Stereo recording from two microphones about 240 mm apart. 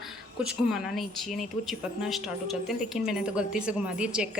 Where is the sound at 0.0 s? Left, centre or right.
Centre.